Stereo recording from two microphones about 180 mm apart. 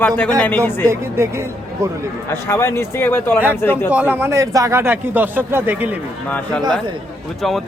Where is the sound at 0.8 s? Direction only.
15° right (ahead or behind).